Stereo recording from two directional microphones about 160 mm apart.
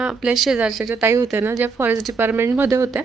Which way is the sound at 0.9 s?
20° right (ahead or behind).